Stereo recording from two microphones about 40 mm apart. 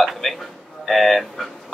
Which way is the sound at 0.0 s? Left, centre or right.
Centre.